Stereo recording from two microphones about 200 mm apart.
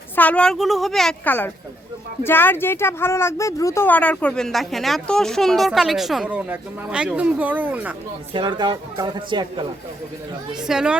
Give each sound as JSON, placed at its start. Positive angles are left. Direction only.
{"t": 0.2, "sound": "speech", "side_deg": 5}
{"t": 8.3, "sound": "speech", "side_deg": -25}
{"t": 10.6, "sound": "speech", "side_deg": -5}